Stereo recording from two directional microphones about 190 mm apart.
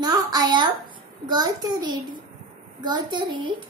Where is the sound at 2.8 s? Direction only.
25° right (ahead or behind).